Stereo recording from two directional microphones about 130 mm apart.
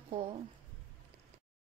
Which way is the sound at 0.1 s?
45° right (ahead or behind).